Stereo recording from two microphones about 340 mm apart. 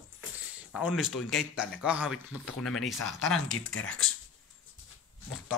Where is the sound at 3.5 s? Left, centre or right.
Left.